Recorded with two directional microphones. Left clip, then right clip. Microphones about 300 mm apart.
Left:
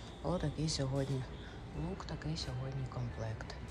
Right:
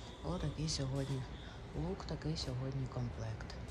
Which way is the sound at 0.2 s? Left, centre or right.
Centre.